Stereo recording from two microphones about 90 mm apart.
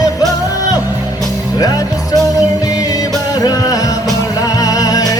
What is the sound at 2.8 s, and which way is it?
Music, 45° left (ahead or behind).